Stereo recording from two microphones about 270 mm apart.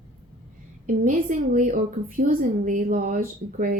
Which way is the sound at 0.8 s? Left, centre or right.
Right.